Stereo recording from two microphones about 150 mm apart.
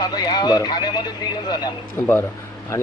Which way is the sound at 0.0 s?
25° left (ahead or behind).